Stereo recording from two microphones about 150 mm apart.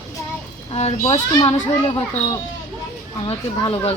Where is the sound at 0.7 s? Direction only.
45° left (ahead or behind).